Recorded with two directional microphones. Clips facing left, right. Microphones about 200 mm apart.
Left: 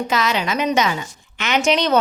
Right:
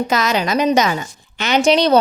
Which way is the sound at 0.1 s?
40° right (ahead or behind).